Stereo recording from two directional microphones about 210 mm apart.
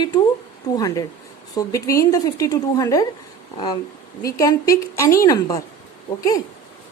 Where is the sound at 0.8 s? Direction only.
15° left (ahead or behind).